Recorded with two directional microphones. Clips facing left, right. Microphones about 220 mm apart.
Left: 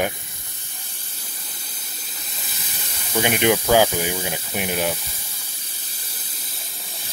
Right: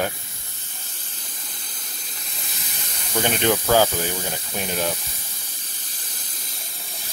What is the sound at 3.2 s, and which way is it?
Speech, 15° left (ahead or behind).